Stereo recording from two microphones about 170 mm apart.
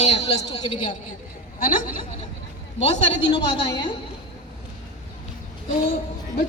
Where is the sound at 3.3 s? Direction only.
30° left (ahead or behind).